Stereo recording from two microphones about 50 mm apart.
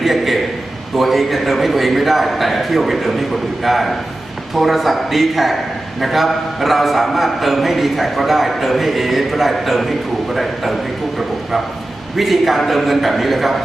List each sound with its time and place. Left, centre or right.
0.0 s a sound: centre
0.9 s a man's voice: centre
12.1 s a man's voice: centre